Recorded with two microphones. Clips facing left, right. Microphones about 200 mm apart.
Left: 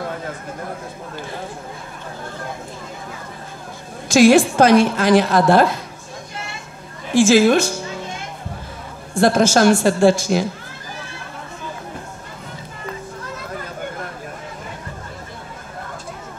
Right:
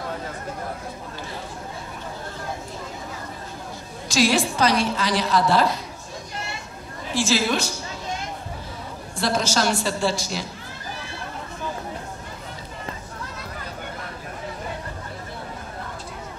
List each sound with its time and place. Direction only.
4.1 s a woman's voice: 50° left (ahead or behind)
7.2 s a woman's voice: 50° left (ahead or behind)
9.1 s a woman's voice: 50° left (ahead or behind)